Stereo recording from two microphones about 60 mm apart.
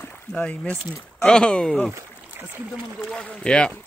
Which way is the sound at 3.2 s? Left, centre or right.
Centre.